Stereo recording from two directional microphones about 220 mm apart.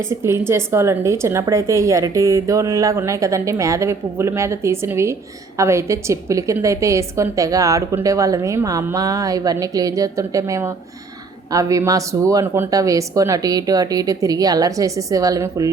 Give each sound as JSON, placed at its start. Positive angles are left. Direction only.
{"t": 0.0, "sound": "a woman's voice", "side_deg": -10}